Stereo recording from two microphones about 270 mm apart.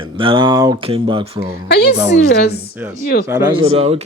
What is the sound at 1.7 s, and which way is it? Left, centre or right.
Speech, left.